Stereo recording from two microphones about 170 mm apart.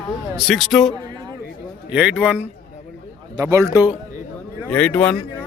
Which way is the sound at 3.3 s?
20° right (ahead or behind).